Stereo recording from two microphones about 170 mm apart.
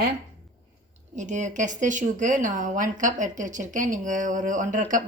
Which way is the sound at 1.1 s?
45° right (ahead or behind).